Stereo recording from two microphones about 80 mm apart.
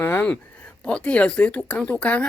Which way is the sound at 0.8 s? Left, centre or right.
Centre.